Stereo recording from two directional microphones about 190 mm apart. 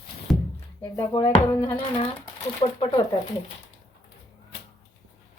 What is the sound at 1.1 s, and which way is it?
Speech, 30° left (ahead or behind).